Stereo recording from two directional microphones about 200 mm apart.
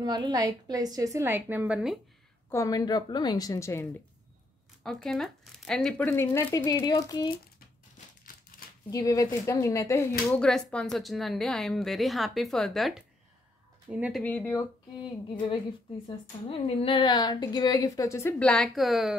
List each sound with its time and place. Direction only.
0.0 s a woman's voice: 20° right (ahead or behind)
2.5 s a woman's voice: 15° left (ahead or behind)
4.8 s a woman's voice: centre (ahead or behind); by 7.3 s 20° left (ahead or behind)
8.9 s a woman's voice: 15° left (ahead or behind); by 14.2 s 5° right (ahead or behind)
14.2 s a woman's voice: 10° left (ahead or behind)
16.4 s a woman's voice: 25° left (ahead or behind); by 19.1 s centre (ahead or behind)